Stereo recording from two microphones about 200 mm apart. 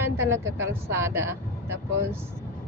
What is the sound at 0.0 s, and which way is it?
Vehicle, 10° right (ahead or behind).